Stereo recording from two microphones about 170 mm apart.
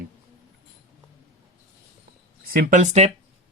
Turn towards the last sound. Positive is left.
turn(degrees=-45)  # may be behind; listen again after turning